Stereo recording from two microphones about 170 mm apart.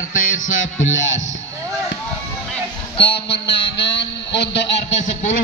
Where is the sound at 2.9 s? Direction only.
35° left (ahead or behind).